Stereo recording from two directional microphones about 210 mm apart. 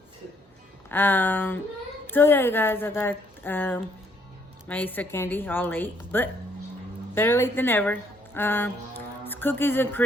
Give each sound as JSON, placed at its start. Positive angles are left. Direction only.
{"t": 0.9, "sound": "speech", "side_deg": 10}